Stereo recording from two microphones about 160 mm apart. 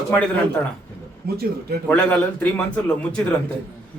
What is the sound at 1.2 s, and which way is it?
Speech, 75° right (ahead or behind).